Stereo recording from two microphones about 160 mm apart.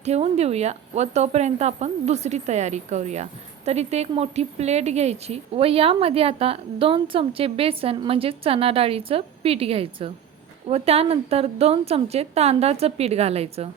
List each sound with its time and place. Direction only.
0.0 s speech: 40° right (ahead or behind)